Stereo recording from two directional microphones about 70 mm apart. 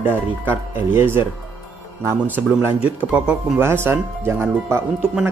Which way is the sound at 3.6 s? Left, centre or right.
Right.